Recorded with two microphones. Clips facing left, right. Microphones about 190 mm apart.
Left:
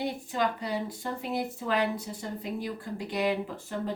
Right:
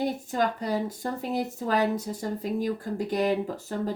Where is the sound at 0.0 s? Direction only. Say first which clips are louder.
Right 3 dB; 45° right (ahead or behind).